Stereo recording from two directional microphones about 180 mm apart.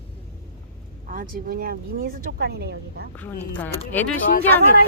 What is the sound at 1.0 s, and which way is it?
Speech, 50° right (ahead or behind).